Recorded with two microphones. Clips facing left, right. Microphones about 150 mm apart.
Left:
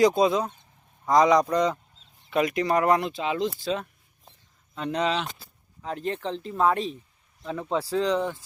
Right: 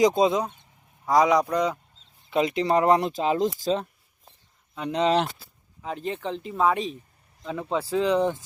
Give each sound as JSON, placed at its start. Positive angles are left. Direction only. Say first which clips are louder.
{"t": 0.0, "sound": "speech", "louder": "even", "side_deg": -20}
{"t": 1.0, "sound": "speech", "louder": "left 1 dB", "side_deg": -10}
{"t": 2.3, "sound": "speech", "louder": "right 1 dB", "side_deg": -25}
{"t": 3.0, "sound": "speech", "louder": "right 3 dB", "side_deg": -40}
{"t": 4.7, "sound": "speech", "louder": "right 1 dB", "side_deg": -15}
{"t": 5.8, "sound": "speech", "louder": "even", "side_deg": -5}
{"t": 8.2, "sound": "speech", "louder": "right 5 dB", "side_deg": -20}